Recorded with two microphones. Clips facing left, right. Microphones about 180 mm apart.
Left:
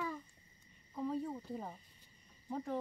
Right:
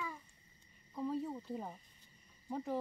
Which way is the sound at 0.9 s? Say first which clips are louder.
Even; centre (ahead or behind).